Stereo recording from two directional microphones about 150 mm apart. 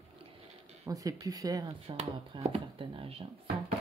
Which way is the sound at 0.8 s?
25° right (ahead or behind).